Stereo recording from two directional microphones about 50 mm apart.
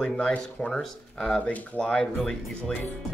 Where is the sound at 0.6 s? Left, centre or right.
Centre.